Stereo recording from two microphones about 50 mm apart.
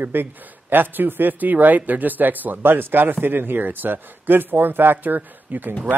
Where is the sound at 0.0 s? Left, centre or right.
Right.